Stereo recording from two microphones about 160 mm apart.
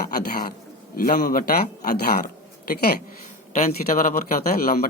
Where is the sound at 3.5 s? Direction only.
50° left (ahead or behind); by 4.8 s 65° left (ahead or behind).